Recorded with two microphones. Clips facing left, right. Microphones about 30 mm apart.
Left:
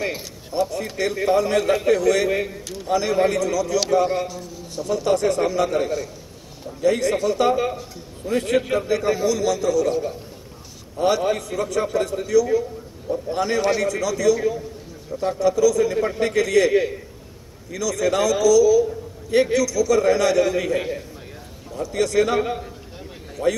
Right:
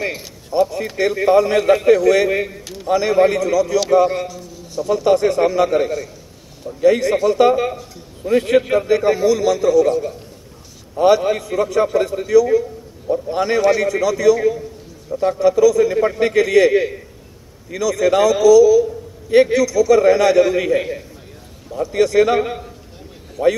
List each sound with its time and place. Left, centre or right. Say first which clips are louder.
0.0 s a man's voice: right 2 dB; centre
4.8 s a man's voice: right 5 dB; centre
9.8 s a man's voice: right 4 dB; centre
11.0 s a man's voice: right 6 dB; centre
15.3 s a man's voice: right 4 dB; centre
21.8 s a man's voice: right 5 dB; centre
23.4 s a man's voice: right 6 dB; centre